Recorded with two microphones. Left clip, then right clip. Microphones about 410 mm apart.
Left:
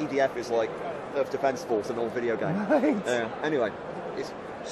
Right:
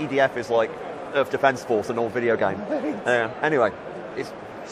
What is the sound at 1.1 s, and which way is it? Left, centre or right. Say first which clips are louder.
Speech: right 7 dB; right.